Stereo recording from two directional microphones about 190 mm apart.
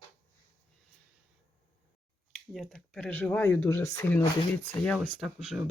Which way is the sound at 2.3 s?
Centre (ahead or behind).